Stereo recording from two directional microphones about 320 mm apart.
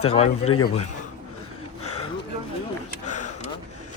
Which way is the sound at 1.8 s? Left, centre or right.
Left.